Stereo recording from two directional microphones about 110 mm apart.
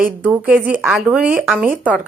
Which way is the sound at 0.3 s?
10° right (ahead or behind).